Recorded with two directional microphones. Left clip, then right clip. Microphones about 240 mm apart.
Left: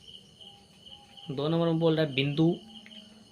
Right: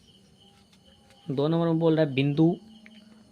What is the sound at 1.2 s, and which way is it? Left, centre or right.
Speech, right.